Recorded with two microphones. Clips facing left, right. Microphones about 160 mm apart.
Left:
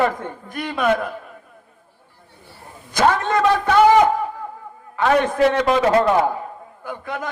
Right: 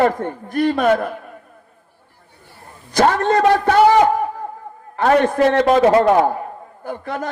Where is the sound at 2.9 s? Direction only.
50° right (ahead or behind).